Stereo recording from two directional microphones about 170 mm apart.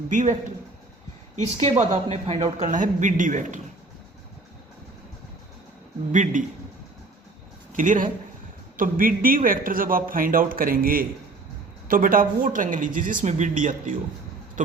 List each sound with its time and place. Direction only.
0.1 s a woman's voice: 45° right (ahead or behind)
1.5 s a woman's voice: 40° right (ahead or behind)
6.1 s a woman's voice: 45° right (ahead or behind)
7.8 s a woman's voice: 50° right (ahead or behind)